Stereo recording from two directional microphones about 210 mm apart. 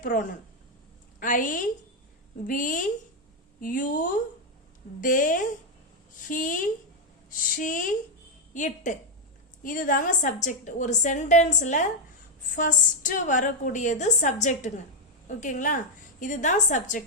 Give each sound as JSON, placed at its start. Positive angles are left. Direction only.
{"t": 0.0, "sound": "a woman's voice", "side_deg": 40}